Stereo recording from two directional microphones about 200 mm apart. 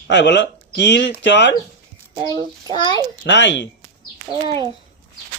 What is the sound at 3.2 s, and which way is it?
Speech, 60° left (ahead or behind).